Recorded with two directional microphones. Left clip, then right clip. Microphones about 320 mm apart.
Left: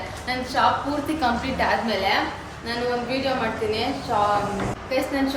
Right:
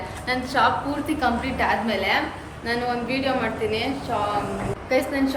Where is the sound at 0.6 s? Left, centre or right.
Centre.